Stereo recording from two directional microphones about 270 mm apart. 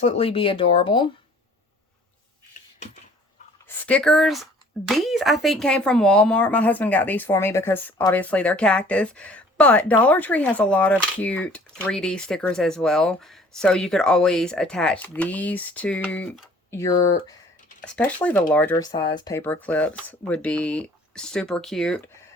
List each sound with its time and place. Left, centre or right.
0.0 s speech: left
3.8 s speech: centre